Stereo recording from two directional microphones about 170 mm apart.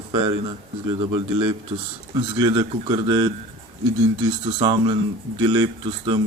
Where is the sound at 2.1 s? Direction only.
25° right (ahead or behind).